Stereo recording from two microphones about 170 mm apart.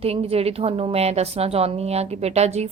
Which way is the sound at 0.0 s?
35° right (ahead or behind).